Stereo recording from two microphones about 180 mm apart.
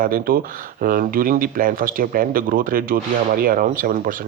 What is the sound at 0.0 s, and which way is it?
Speech, 50° right (ahead or behind).